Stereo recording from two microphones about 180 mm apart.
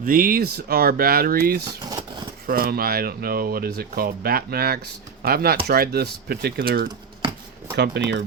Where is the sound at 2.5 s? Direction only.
55° right (ahead or behind).